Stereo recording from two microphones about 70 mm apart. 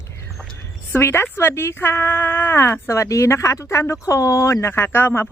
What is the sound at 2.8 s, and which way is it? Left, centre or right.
Speech, left.